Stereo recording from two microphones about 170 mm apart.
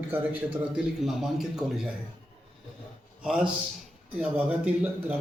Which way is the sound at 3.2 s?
5° right (ahead or behind).